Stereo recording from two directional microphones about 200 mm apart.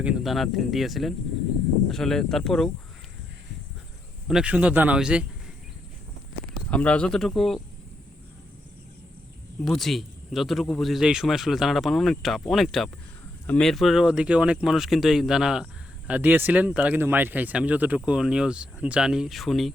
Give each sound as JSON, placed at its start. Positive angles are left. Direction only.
{"t": 0.0, "sound": "speech", "side_deg": -5}
{"t": 4.3, "sound": "speech", "side_deg": -5}
{"t": 6.7, "sound": "speech", "side_deg": 5}
{"t": 9.6, "sound": "speech", "side_deg": 0}